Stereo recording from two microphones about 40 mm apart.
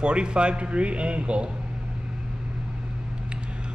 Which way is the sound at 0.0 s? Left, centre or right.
Right.